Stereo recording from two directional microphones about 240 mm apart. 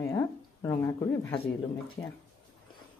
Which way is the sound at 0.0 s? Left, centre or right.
Centre.